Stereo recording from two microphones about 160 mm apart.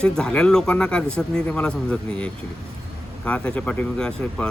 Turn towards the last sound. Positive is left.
turn(degrees=5)  # may be behind; listen again after turning